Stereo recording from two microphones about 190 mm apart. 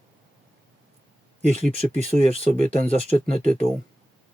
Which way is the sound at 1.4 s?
40° right (ahead or behind).